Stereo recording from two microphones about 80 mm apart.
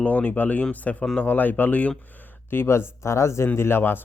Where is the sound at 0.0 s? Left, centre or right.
Centre.